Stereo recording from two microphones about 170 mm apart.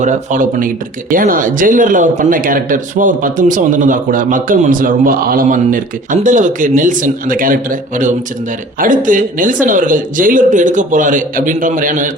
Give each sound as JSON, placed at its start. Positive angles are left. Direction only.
{"t": 0.0, "sound": "speech", "side_deg": -45}